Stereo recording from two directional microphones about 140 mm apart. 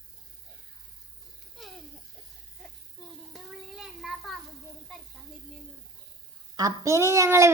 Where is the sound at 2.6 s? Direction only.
Centre (ahead or behind).